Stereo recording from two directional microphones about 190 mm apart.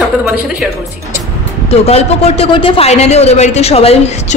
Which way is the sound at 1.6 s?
35° left (ahead or behind).